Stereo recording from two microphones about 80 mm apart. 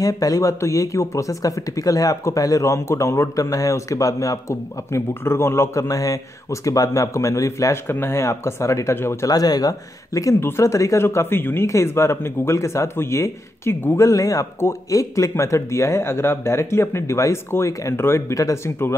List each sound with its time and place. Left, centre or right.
0.0 s speech: left
9.3 s speech: left
10.4 s speech: left
18.3 s speech: left